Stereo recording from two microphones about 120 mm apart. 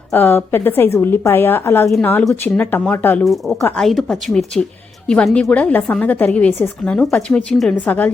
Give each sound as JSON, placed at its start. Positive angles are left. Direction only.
{"t": 0.1, "sound": "a woman's voice", "side_deg": 15}
{"t": 3.8, "sound": "a woman's voice", "side_deg": 0}